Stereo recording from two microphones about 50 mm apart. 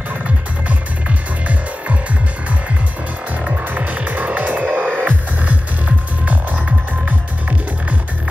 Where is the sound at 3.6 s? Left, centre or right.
Right.